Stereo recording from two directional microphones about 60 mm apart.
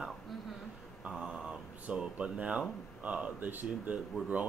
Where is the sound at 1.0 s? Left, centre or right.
Centre.